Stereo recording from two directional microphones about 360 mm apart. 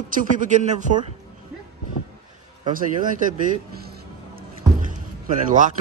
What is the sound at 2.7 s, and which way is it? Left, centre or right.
Speech, right.